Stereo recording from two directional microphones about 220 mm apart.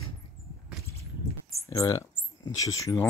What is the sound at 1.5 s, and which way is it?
Speech, 15° left (ahead or behind).